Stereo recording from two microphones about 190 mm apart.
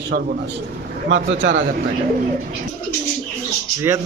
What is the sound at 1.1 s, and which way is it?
Speech, 75° right (ahead or behind).